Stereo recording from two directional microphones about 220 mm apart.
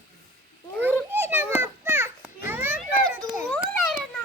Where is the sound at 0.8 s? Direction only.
10° right (ahead or behind).